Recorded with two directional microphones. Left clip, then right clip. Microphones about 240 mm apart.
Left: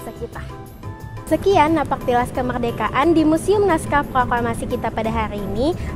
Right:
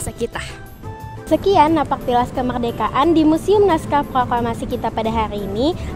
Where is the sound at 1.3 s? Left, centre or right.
Centre.